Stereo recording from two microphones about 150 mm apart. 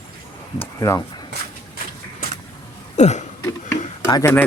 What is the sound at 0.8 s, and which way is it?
Speech, 25° left (ahead or behind).